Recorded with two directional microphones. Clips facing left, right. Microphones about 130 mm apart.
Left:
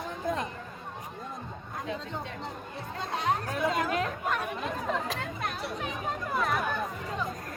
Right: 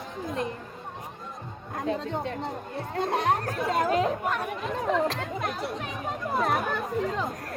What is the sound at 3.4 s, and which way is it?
Speech, 40° right (ahead or behind).